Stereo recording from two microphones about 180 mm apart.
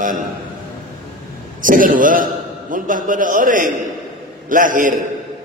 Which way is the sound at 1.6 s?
50° right (ahead or behind).